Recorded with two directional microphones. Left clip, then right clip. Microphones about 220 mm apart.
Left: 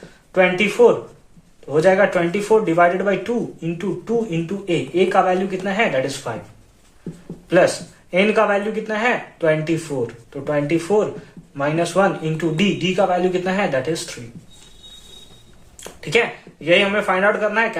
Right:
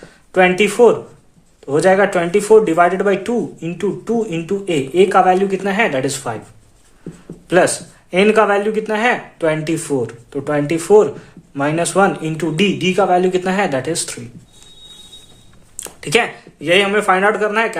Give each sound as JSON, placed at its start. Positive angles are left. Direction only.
{"t": 0.3, "sound": "speech", "side_deg": -50}
{"t": 8.1, "sound": "speech", "side_deg": -50}
{"t": 15.8, "sound": "speech", "side_deg": -50}